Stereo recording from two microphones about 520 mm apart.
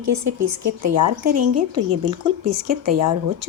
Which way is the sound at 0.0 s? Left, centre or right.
Right.